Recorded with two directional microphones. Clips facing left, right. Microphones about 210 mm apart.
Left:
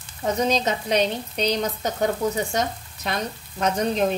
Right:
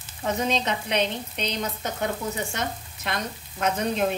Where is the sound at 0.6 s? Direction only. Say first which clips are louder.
Left 4 dB; 40° left (ahead or behind).